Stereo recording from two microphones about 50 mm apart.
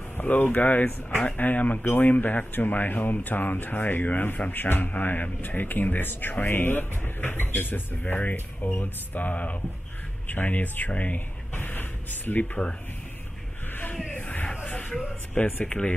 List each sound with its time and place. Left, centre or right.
0.2 s speech: left
11.1 s a sound: left
14.1 s music: left
14.6 s music: left
15.6 s speech: left